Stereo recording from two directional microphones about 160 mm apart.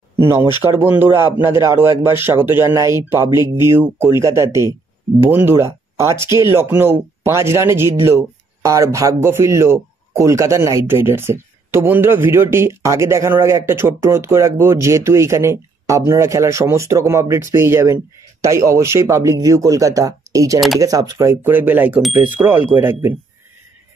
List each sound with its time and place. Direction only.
0.2 s speech: 15° right (ahead or behind)